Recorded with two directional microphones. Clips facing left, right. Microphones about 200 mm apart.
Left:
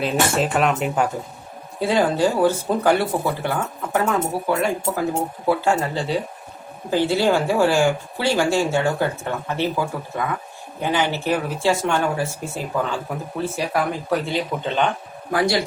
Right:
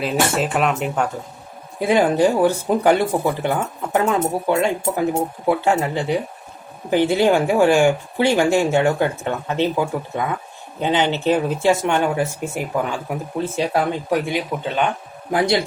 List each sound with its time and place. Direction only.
0.0 s speech: centre (ahead or behind)
1.8 s speech: 15° right (ahead or behind)
15.3 s speech: 20° right (ahead or behind)